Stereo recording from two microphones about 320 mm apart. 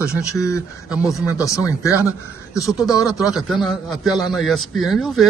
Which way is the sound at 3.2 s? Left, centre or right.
Centre.